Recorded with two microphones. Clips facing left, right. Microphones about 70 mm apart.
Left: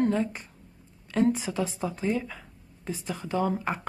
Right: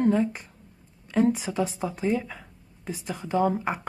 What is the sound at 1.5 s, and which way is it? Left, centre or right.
Speech, centre.